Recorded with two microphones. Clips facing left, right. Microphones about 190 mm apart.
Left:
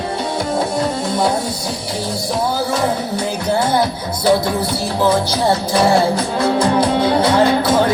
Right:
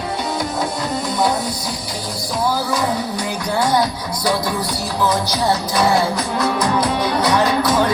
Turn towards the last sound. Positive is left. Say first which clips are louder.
# left 3 dB
turn(degrees=25)  # may be behind; listen again after turning